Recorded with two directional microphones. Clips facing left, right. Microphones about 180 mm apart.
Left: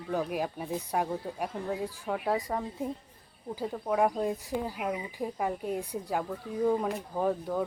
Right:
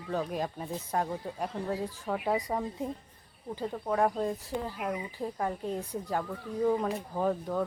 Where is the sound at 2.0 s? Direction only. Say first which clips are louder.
Even; centre (ahead or behind).